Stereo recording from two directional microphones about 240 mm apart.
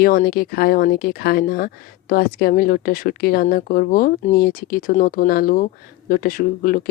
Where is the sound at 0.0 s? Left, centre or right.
Left.